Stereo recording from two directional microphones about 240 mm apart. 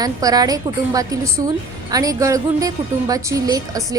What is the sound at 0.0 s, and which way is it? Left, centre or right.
A woman's voice, centre.